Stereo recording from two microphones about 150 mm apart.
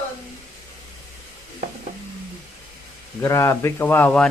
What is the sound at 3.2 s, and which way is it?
Speech, 20° left (ahead or behind).